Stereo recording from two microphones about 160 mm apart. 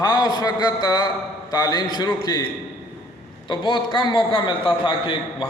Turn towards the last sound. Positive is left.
turn(degrees=30)  # may be behind; listen again after turning